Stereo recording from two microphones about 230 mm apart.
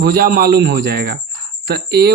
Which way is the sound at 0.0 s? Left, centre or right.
Right.